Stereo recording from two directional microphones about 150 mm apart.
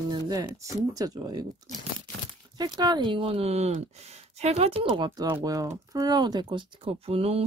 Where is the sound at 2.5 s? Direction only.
25° right (ahead or behind).